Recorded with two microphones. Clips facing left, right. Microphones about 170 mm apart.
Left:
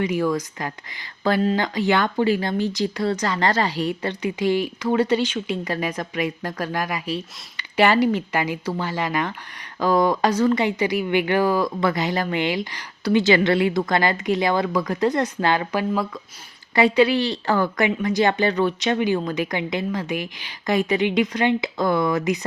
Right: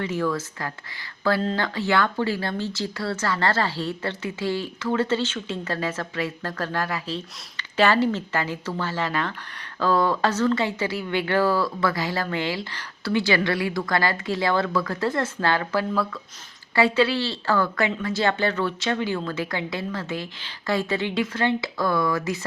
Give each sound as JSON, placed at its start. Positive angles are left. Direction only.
{"t": 0.0, "sound": "speech", "side_deg": 15}